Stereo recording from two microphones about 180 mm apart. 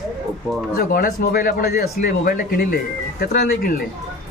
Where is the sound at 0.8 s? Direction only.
55° left (ahead or behind).